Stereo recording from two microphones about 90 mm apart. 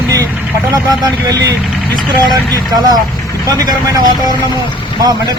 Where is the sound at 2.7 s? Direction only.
50° right (ahead or behind).